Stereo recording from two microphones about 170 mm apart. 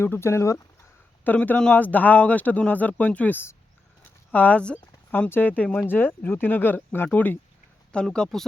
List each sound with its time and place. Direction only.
0.0 s speech: 15° left (ahead or behind)